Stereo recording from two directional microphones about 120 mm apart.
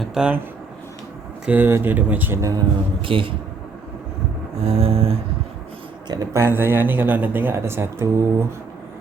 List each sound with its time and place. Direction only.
0.0 s speech: 5° right (ahead or behind)
1.5 s speech: 20° right (ahead or behind)
2.4 s a man's voice: 30° right (ahead or behind)
3.0 s a sound: 45° right (ahead or behind)
4.6 s a sound: 55° right (ahead or behind)
6.1 s speech: 25° right (ahead or behind)